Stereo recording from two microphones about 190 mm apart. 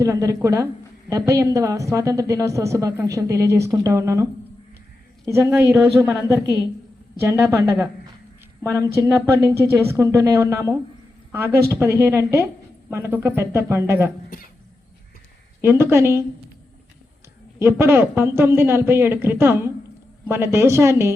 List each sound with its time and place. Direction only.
0.0 s a woman's voice: 15° right (ahead or behind)
9.0 s a woman's voice: 15° right (ahead or behind)
15.6 s a woman's voice: 10° right (ahead or behind)
17.6 s a woman's voice: 10° right (ahead or behind)